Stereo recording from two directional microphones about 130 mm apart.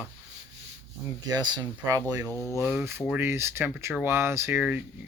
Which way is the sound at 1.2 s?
30° right (ahead or behind).